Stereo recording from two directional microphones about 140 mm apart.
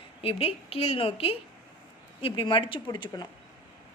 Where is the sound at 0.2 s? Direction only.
45° left (ahead or behind).